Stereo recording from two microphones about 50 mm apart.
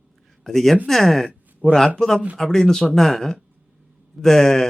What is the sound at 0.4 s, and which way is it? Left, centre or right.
Speech, centre.